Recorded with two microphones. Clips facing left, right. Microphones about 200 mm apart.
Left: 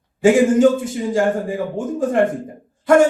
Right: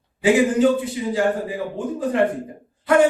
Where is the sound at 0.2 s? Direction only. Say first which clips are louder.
Left 4 dB; 45° left (ahead or behind).